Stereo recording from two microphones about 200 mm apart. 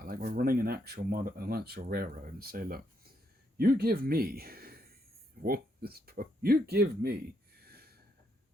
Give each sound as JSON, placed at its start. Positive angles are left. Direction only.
{"t": 0.0, "sound": "speech", "side_deg": -45}